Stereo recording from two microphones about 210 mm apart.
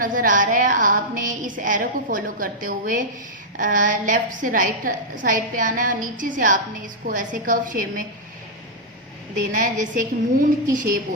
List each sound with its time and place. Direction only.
0.0 s a woman's voice: 40° right (ahead or behind)
9.4 s a woman's voice: 40° right (ahead or behind)